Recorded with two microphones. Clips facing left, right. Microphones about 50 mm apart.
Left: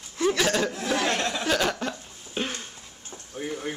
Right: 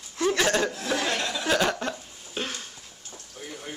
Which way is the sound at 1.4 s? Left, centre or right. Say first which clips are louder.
Right 3 dB; centre.